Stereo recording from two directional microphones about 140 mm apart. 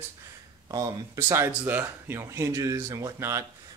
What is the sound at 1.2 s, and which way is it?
Speech, 20° right (ahead or behind).